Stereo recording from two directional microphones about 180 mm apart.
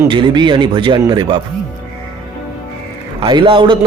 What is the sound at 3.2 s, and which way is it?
Speech, 25° right (ahead or behind).